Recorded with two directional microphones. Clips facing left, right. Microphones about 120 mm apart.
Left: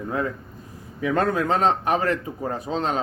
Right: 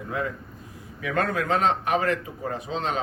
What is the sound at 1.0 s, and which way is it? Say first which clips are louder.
A man's voice: left 4 dB; 30° left (ahead or behind).